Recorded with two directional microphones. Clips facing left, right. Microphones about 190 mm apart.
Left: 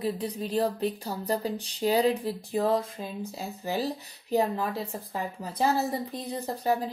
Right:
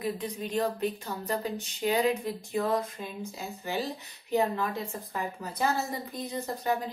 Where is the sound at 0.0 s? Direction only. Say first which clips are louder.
Left 2 dB; 35° left (ahead or behind).